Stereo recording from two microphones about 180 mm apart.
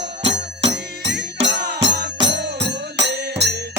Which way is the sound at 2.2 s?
70° right (ahead or behind).